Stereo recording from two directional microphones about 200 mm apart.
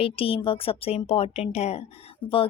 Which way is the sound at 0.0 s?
25° left (ahead or behind).